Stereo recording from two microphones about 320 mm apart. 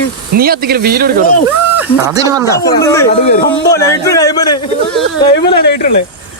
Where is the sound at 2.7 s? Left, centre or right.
Centre.